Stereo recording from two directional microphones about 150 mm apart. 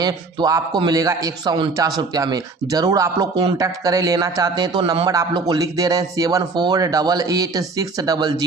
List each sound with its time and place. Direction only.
0.0 s speech: 25° right (ahead or behind)